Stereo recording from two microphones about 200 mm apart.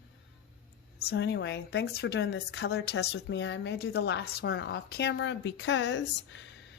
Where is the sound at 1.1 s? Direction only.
60° left (ahead or behind).